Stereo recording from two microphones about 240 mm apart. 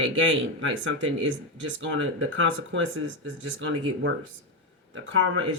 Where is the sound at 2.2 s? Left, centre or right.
Right.